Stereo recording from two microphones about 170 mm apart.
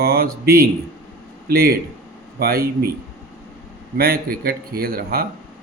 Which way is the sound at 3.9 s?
60° right (ahead or behind).